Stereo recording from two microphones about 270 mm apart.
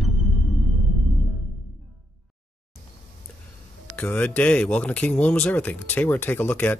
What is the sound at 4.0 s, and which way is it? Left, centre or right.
Speech, centre.